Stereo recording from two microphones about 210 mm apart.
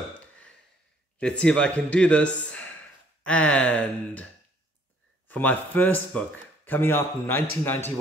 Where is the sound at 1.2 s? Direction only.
5° left (ahead or behind).